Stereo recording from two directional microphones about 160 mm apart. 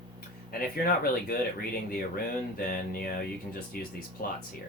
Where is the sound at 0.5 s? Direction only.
65° left (ahead or behind).